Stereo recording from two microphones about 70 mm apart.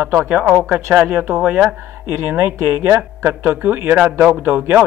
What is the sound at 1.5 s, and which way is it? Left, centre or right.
Speech, centre.